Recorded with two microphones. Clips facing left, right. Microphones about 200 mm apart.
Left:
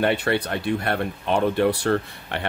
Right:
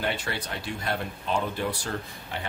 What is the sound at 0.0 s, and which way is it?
Speech, 60° left (ahead or behind).